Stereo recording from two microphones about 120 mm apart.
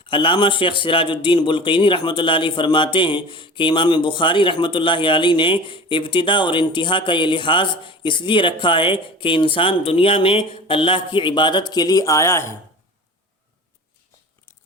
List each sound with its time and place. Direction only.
0.0 s a man's voice: 45° left (ahead or behind); by 12.5 s 20° left (ahead or behind)